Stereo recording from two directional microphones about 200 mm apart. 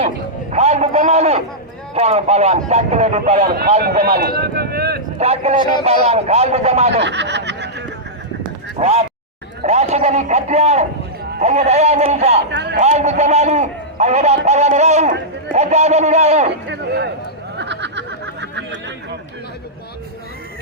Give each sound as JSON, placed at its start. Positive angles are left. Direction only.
{"t": 0.5, "sound": "a man's voice", "side_deg": -35}
{"t": 4.0, "sound": "speech", "side_deg": -50}
{"t": 5.2, "sound": "a man's voice", "side_deg": -30}
{"t": 7.0, "sound": "snicker", "side_deg": -60}
{"t": 8.8, "sound": "a man's voice", "side_deg": -30}
{"t": 12.5, "sound": "a man's voice", "side_deg": -60}
{"t": 12.7, "sound": "a man's voice", "side_deg": -35}
{"t": 16.6, "sound": "speech", "side_deg": -55}
{"t": 17.6, "sound": "snicker", "side_deg": -60}